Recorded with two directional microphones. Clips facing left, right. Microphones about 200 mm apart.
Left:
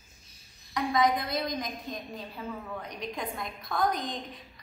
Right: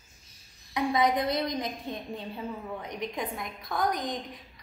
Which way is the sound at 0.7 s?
30° right (ahead or behind).